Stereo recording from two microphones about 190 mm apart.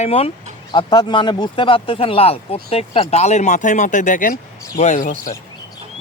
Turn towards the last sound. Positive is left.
turn(degrees=40)  # may be behind; listen again after turning